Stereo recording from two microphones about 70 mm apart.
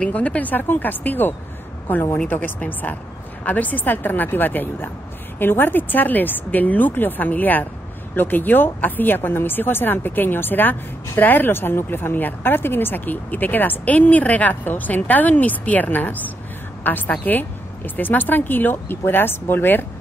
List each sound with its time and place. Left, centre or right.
0.0 s a woman's voice: centre